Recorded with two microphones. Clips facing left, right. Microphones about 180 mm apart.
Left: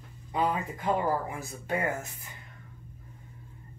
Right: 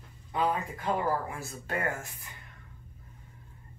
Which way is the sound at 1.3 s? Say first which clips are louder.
Left 3 dB; 20° left (ahead or behind).